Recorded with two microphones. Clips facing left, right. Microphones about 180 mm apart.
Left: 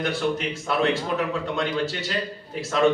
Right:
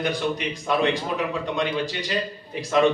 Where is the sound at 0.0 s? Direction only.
15° right (ahead or behind).